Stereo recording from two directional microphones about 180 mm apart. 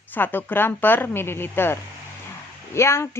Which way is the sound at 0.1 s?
10° left (ahead or behind).